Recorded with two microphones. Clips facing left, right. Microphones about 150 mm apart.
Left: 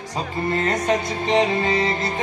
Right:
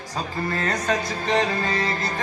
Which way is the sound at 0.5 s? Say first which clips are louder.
Left 4 dB; 20° left (ahead or behind).